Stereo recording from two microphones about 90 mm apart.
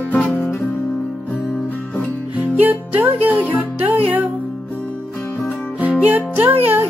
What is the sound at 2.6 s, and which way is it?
Music, 20° right (ahead or behind).